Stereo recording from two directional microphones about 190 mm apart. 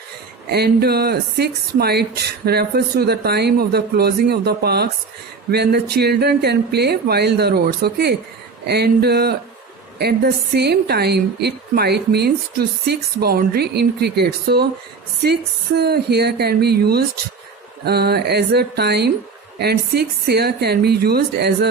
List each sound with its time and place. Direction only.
0.5 s a woman's voice: 55° right (ahead or behind)
15.8 s a woman's voice: 55° right (ahead or behind)